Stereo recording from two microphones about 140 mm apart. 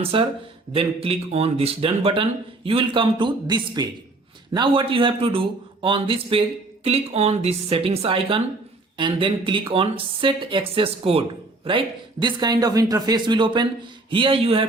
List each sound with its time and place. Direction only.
0.0 s a woman's voice: 40° right (ahead or behind)